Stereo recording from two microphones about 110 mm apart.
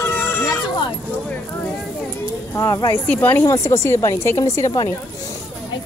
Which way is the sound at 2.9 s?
15° left (ahead or behind).